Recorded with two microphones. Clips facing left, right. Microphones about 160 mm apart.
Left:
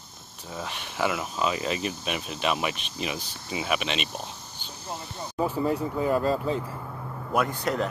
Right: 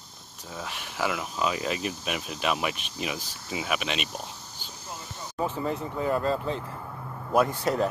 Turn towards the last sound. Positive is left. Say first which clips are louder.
# right 2 dB
turn(degrees=-25)  # may be behind; listen again after turning